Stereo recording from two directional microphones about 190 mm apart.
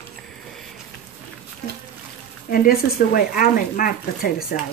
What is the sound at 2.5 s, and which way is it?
Speech, 50° left (ahead or behind).